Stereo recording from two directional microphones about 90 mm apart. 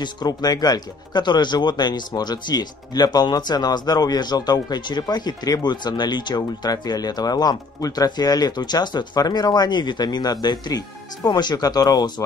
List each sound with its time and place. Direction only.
0.0 s speech: 50° left (ahead or behind)